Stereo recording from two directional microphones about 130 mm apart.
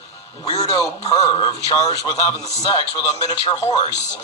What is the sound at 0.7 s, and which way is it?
A man's voice, 30° left (ahead or behind).